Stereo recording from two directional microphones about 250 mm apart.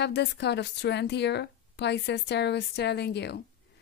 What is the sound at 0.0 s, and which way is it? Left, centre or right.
Speech, left.